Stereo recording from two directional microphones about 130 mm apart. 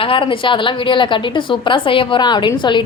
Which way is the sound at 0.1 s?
40° left (ahead or behind).